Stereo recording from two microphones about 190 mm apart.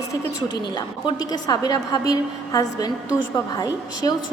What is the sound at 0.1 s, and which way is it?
A woman's voice, 20° left (ahead or behind).